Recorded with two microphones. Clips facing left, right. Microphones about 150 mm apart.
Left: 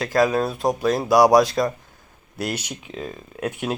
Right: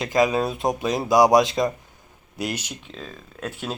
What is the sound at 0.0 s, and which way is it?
Speech, 15° right (ahead or behind).